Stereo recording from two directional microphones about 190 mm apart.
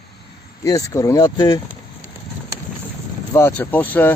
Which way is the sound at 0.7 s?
15° left (ahead or behind).